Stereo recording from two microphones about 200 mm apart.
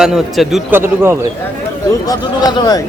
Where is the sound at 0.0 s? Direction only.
Centre (ahead or behind).